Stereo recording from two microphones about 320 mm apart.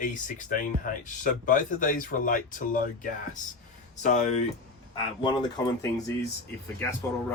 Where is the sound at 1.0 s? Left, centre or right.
Left.